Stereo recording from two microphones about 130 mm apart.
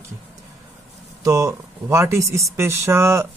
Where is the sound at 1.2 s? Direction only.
25° right (ahead or behind).